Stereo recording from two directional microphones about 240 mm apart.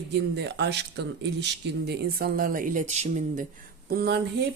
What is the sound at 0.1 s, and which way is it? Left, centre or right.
Speech, right.